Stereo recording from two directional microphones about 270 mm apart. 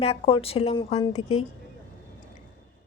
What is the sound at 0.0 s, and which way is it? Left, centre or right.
Speech, left.